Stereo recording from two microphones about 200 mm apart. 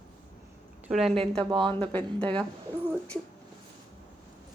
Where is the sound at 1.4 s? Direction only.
25° right (ahead or behind).